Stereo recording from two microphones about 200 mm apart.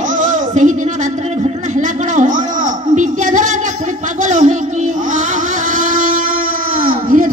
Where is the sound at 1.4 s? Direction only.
40° right (ahead or behind).